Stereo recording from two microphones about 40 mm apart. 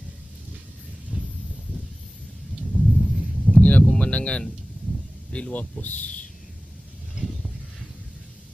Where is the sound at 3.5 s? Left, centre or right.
Left.